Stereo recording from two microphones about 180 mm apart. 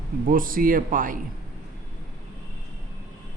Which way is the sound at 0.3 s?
50° right (ahead or behind).